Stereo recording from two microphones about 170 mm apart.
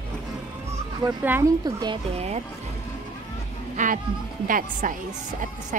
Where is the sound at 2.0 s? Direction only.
40° right (ahead or behind).